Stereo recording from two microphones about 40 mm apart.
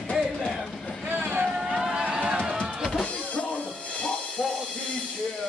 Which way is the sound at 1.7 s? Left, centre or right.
Centre.